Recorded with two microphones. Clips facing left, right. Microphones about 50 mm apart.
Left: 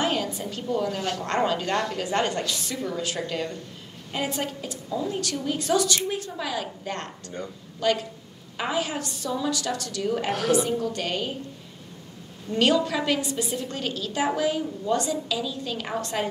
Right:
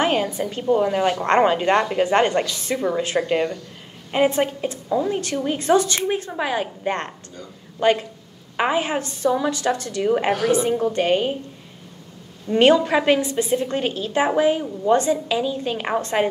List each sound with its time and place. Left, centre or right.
0.0 s a woman's voice: right
12.4 s a woman's voice: right